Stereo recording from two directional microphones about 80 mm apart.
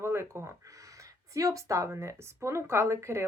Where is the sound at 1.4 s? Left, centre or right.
Right.